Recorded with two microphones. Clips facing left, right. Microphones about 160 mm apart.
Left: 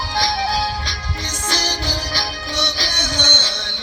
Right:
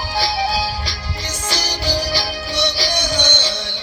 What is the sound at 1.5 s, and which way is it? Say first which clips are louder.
Music: right 1 dB; 10° right (ahead or behind).